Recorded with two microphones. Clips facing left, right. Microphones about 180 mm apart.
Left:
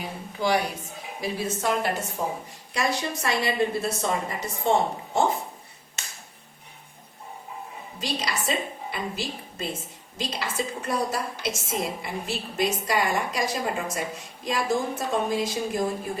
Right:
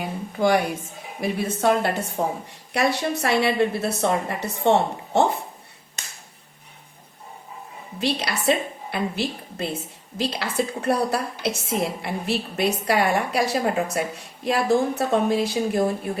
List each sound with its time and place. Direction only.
0.3 s a woman's voice: 50° right (ahead or behind); by 5.2 s 70° right (ahead or behind)
7.9 s a woman's voice: 65° right (ahead or behind)